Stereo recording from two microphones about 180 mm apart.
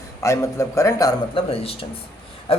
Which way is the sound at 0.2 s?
15° left (ahead or behind).